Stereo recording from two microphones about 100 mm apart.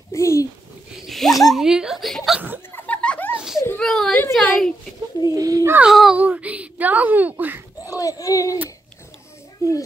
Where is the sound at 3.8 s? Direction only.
5° left (ahead or behind).